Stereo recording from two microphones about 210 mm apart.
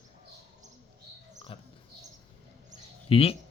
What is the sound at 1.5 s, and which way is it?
Speech, 25° left (ahead or behind).